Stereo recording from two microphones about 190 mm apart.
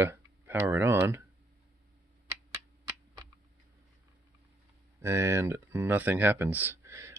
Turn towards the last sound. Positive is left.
turn(degrees=-15)  # may be behind; listen again after turning